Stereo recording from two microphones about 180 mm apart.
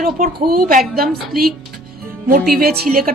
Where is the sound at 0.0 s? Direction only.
45° right (ahead or behind).